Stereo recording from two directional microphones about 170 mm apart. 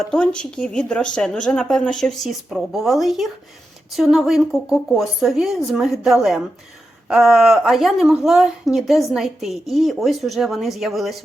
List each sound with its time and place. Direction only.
0.1 s speech: 5° left (ahead or behind)